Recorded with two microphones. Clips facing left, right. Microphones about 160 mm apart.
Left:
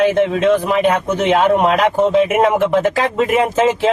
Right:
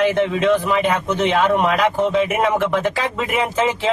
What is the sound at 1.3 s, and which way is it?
Speech, 50° left (ahead or behind).